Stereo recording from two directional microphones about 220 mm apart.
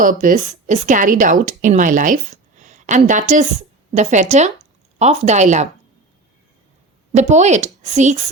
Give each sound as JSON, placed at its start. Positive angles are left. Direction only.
{"t": 0.0, "sound": "a woman's voice", "side_deg": -35}
{"t": 7.1, "sound": "a woman's voice", "side_deg": -30}